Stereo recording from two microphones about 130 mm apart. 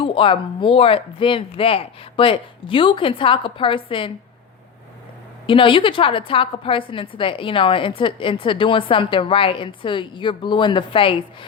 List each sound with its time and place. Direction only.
0.0 s speech: 40° left (ahead or behind)
5.5 s a woman's voice: 40° left (ahead or behind)